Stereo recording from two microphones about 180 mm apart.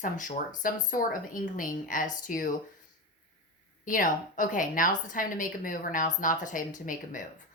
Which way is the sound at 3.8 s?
45° left (ahead or behind).